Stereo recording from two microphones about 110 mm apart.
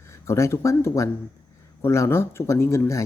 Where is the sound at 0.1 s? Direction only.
25° left (ahead or behind).